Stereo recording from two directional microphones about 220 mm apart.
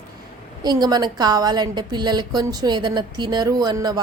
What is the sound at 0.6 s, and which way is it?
A woman's voice, 20° right (ahead or behind).